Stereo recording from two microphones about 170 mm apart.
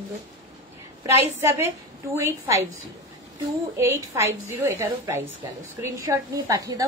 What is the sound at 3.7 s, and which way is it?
A woman's voice, 15° right (ahead or behind).